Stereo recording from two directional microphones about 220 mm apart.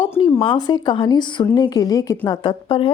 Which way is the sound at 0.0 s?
15° left (ahead or behind).